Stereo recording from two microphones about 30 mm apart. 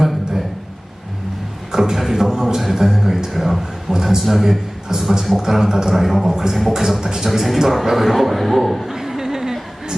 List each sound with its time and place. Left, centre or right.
1.7 s beatboxing: centre
2.7 s a sound: centre
3.3 s a sound: centre
3.9 s speech: centre
4.2 s a man's voice: centre
4.4 s a man's voice: centre
5.4 s speech: centre
5.9 s a man's voice: centre
6.2 s speech: centre
7.0 s speech: right
7.7 s a man's voice: centre
8.8 s a sound: centre